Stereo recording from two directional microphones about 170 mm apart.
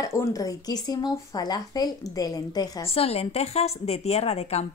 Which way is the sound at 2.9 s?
35° left (ahead or behind).